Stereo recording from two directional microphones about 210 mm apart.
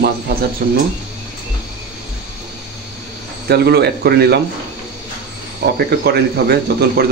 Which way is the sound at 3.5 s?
50° right (ahead or behind).